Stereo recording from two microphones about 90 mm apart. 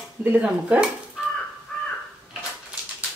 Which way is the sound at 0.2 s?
20° right (ahead or behind).